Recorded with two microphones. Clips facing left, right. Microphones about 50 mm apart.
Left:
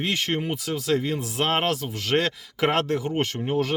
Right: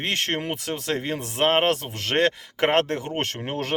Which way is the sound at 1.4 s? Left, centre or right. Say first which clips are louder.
Right 4 dB; right.